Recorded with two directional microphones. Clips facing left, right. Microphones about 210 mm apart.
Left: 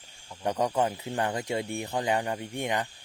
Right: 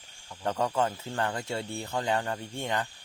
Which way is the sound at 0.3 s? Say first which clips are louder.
Left 2 dB; 15° left (ahead or behind).